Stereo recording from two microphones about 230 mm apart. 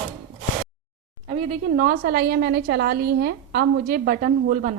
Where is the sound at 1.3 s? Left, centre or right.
Right.